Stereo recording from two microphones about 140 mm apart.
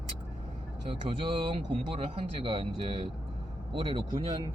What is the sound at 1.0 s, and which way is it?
Speech, 40° right (ahead or behind).